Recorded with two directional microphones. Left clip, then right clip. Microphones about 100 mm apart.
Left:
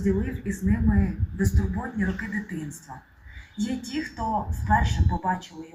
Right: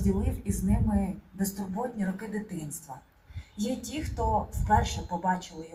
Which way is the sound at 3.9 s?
25° right (ahead or behind).